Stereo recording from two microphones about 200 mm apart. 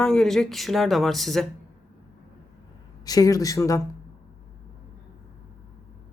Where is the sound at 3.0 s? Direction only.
20° left (ahead or behind).